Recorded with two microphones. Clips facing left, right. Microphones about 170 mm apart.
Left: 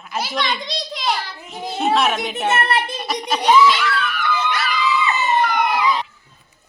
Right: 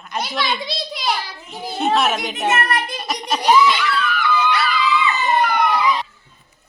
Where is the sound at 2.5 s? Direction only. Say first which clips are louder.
Left 1 dB; 30° left (ahead or behind).